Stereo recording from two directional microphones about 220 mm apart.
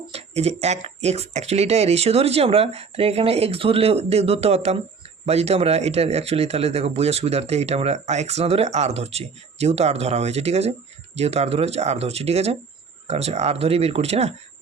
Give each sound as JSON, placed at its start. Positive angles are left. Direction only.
{"t": 0.1, "sound": "speech", "side_deg": -30}